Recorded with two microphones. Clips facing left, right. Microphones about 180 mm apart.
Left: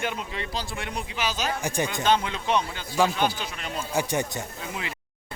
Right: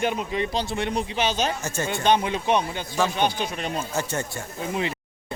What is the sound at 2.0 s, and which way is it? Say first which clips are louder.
A man's voice: right 4 dB; 15° right (ahead or behind).